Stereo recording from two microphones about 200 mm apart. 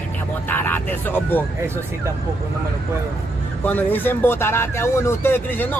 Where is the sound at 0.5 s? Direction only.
10° left (ahead or behind).